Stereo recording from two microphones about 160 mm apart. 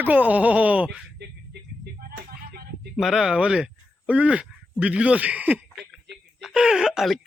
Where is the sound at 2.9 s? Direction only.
Centre (ahead or behind).